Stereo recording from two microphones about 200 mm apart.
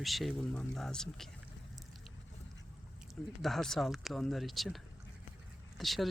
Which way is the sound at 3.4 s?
Centre (ahead or behind).